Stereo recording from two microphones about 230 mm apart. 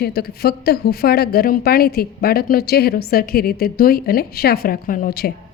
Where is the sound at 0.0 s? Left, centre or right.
Left.